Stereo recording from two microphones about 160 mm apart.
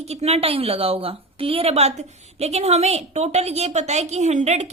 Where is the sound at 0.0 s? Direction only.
40° right (ahead or behind).